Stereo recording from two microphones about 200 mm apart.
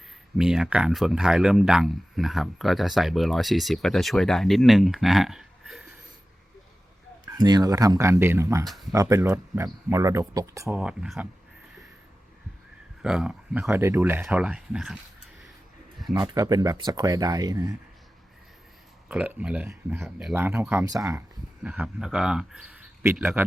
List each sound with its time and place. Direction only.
0.3 s speech: 5° right (ahead or behind)
7.3 s speech: 20° right (ahead or behind)
10.8 s speech: 5° right (ahead or behind)
13.0 s speech: 5° right (ahead or behind)
16.1 s speech: 20° right (ahead or behind)
19.0 s speech: 5° right (ahead or behind)
21.6 s speech: 5° right (ahead or behind)